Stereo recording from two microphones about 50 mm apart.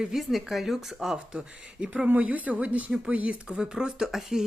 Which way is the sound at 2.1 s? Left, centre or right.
Right.